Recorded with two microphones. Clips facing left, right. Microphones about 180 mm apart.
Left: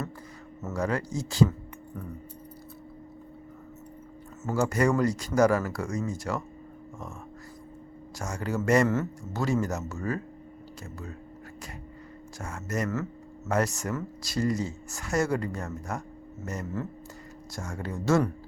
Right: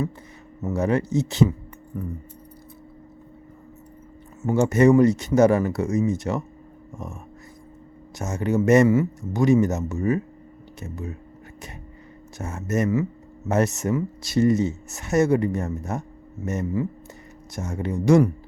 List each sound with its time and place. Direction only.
0.7 s speech: 25° right (ahead or behind)
4.5 s speech: 25° right (ahead or behind)
8.2 s speech: 20° right (ahead or behind)
12.4 s speech: 25° right (ahead or behind)